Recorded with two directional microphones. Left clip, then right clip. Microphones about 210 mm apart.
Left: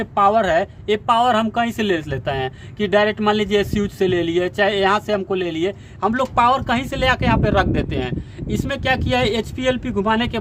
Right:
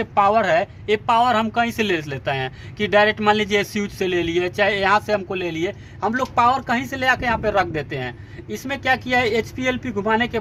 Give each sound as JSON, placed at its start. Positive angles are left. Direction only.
{"t": 0.0, "sound": "speech", "side_deg": 20}